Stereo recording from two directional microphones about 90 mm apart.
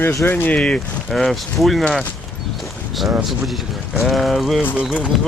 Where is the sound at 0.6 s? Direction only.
5° left (ahead or behind).